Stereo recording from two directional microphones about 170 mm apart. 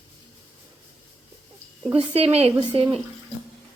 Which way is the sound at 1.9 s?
35° right (ahead or behind).